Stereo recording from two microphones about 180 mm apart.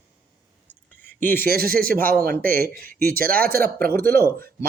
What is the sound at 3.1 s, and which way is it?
Speech, 55° right (ahead or behind).